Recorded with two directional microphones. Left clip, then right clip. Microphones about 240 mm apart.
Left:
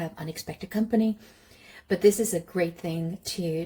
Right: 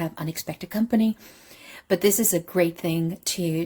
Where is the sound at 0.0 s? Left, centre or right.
Right.